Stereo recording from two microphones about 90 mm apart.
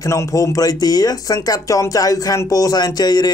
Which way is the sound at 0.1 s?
40° left (ahead or behind).